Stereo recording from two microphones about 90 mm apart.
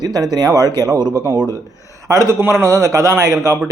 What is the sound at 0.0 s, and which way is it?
Speech, 45° right (ahead or behind).